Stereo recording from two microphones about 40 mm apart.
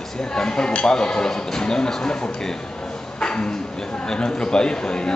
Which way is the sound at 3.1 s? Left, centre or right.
Left.